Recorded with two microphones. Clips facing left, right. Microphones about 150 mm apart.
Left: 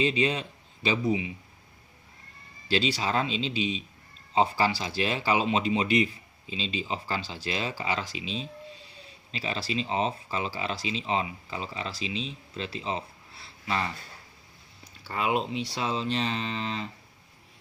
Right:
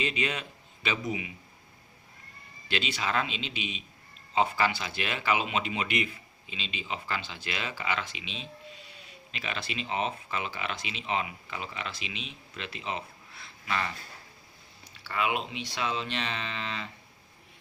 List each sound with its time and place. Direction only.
0.0 s speech: 30° left (ahead or behind)
2.6 s speech: 35° left (ahead or behind)
15.0 s speech: 35° left (ahead or behind)